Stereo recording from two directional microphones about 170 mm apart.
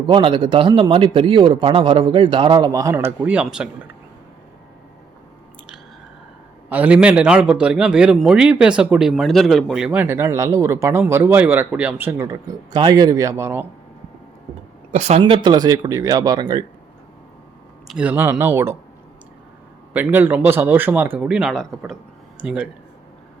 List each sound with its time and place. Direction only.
0.1 s a man's voice: 30° right (ahead or behind); by 3.7 s 5° right (ahead or behind)
6.7 s a man's voice: 10° right (ahead or behind)
14.9 s speech: 40° right (ahead or behind)
15.4 s a man's voice: 25° right (ahead or behind)
17.8 s a man's voice: 5° right (ahead or behind)
19.9 s a man's voice: 10° right (ahead or behind)